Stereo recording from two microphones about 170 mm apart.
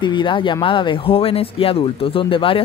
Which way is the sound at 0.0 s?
30° left (ahead or behind).